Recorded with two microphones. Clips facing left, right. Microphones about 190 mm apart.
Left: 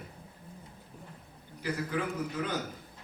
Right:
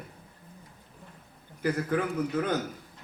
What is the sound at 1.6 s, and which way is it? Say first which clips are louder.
Speech: right 5 dB; 50° right (ahead or behind).